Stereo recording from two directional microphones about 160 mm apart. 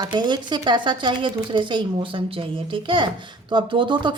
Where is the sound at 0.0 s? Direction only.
30° right (ahead or behind).